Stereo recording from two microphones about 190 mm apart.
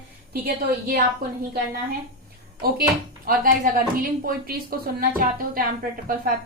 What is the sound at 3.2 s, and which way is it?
A woman's voice, 50° right (ahead or behind).